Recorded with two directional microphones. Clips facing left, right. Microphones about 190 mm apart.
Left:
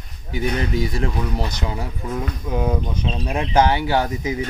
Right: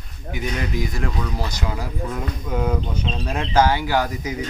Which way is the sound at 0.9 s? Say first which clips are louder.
Left 3 dB; 25° left (ahead or behind).